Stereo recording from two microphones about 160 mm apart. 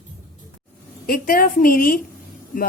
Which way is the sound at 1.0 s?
65° left (ahead or behind).